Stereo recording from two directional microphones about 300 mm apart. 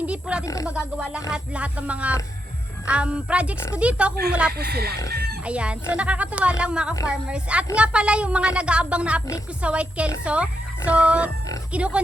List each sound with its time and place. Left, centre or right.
0.0 s speech: centre
0.4 s speech: centre
0.7 s speech: centre
4.5 s speech: right
5.5 s speech: centre